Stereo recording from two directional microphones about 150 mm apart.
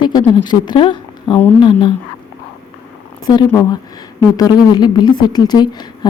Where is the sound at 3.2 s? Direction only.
25° left (ahead or behind).